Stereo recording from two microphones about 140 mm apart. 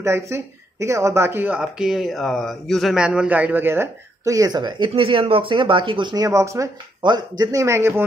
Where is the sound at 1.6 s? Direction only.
5° right (ahead or behind).